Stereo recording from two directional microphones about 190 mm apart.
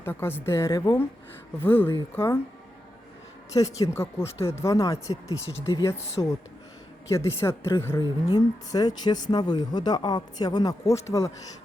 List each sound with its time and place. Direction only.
0.0 s a woman's voice: 10° left (ahead or behind)
3.5 s a woman's voice: 15° left (ahead or behind)
7.1 s a woman's voice: 15° left (ahead or behind)